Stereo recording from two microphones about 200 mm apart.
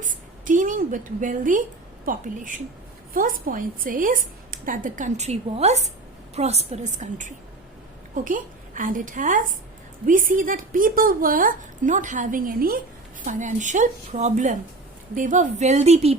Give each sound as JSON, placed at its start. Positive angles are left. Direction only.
{"t": 0.0, "sound": "a woman's voice", "side_deg": -40}